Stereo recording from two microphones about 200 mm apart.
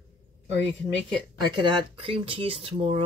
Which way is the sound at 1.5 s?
25° right (ahead or behind).